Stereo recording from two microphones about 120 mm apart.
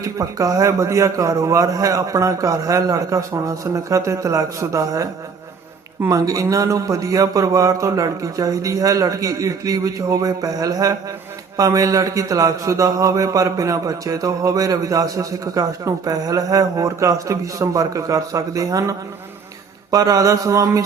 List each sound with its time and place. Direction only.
0.0 s speech: 25° right (ahead or behind)